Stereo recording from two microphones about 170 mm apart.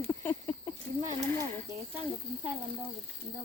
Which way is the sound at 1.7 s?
20° left (ahead or behind).